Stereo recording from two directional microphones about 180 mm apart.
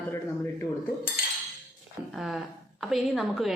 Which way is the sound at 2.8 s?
Centre (ahead or behind).